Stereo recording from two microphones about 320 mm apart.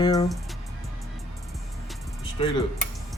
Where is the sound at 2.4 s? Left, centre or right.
Centre.